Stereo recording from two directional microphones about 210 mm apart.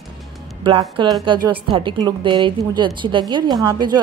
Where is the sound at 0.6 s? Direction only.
25° right (ahead or behind).